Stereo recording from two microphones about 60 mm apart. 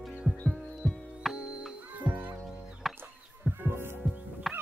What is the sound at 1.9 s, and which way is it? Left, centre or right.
Music, right.